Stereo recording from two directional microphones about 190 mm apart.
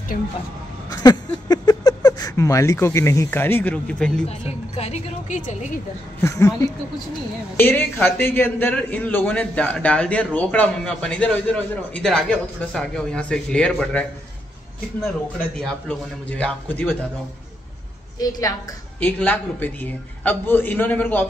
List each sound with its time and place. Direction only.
0.1 s speech: 50° left (ahead or behind)
1.0 s speech: 20° left (ahead or behind); by 4.3 s 5° left (ahead or behind)
4.7 s a woman's voice: 35° left (ahead or behind)
6.2 s a man's voice: 15° left (ahead or behind)
15.5 s a man's voice: 5° left (ahead or behind)
18.9 s a man's voice: 5° left (ahead or behind)